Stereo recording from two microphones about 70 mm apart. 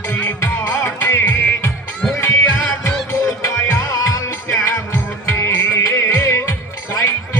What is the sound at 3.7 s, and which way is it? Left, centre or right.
Music, left.